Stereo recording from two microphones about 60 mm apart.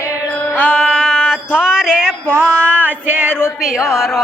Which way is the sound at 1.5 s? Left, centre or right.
Centre.